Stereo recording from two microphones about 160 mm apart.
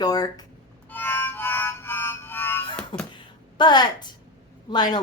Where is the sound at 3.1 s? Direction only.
30° left (ahead or behind).